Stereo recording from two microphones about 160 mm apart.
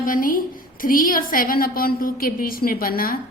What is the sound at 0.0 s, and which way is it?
A woman's voice, 60° left (ahead or behind).